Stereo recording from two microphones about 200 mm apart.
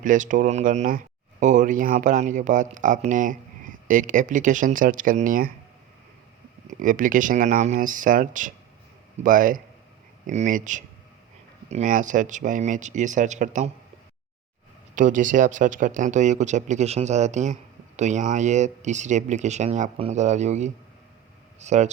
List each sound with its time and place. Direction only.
0.0 s speech: 40° right (ahead or behind)
6.7 s speech: 40° right (ahead or behind)
14.9 s speech: 40° right (ahead or behind)